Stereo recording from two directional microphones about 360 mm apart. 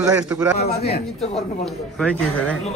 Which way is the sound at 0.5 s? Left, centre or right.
Left.